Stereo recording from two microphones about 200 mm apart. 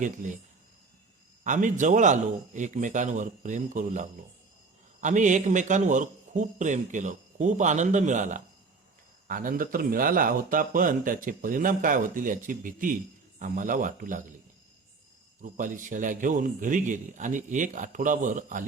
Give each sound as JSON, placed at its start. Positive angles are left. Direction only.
{"t": 1.5, "sound": "a man's voice", "side_deg": -40}
{"t": 15.4, "sound": "a man's voice", "side_deg": -40}